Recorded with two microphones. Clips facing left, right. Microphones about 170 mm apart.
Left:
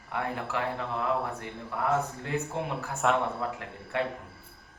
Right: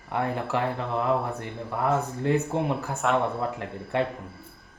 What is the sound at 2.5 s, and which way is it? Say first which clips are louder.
Speech: right 6 dB; 30° right (ahead or behind).